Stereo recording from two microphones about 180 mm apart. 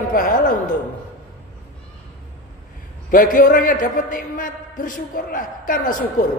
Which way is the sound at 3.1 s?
45° left (ahead or behind).